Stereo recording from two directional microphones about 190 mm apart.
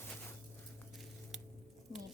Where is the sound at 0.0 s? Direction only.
10° left (ahead or behind).